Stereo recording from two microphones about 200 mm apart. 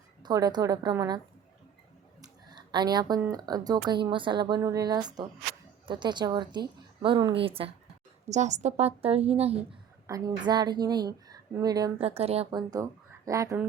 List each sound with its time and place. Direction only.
0.2 s a woman's voice: 20° right (ahead or behind)
2.5 s a sound: 20° right (ahead or behind)
3.3 s a woman's voice: 20° right (ahead or behind)
10.1 s a woman's voice: 20° right (ahead or behind)
12.0 s a woman's voice: 30° right (ahead or behind); by 13.7 s 15° right (ahead or behind)